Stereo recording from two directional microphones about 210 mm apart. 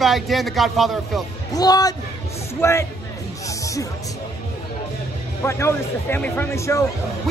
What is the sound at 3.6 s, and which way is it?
Music, 15° left (ahead or behind).